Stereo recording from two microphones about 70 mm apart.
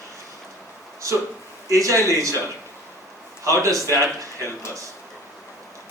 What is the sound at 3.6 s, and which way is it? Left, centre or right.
Speech, right.